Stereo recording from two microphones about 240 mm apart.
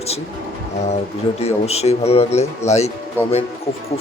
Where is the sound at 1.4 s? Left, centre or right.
Left.